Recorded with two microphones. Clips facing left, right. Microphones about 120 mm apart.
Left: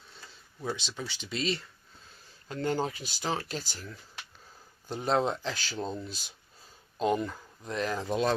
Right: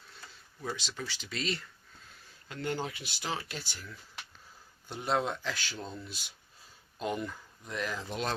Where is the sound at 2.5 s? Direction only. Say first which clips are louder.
Left 5 dB; 35° left (ahead or behind).